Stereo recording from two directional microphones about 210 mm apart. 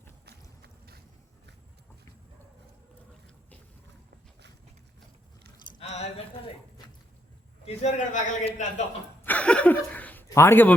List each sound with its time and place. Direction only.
5.8 s a man's voice: 30° left (ahead or behind)
7.6 s a man's voice: 30° left (ahead or behind)
9.2 s a sound: 5° left (ahead or behind)